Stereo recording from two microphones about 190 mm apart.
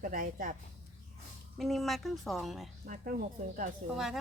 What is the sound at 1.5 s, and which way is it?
Speech, centre (ahead or behind).